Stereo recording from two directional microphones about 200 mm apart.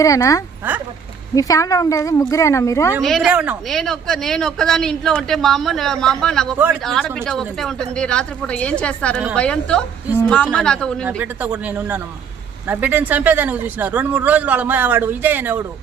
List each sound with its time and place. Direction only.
0.0 s speech: 15° left (ahead or behind)
3.0 s a woman's voice: centre (ahead or behind)
11.0 s a man's voice: 10° right (ahead or behind)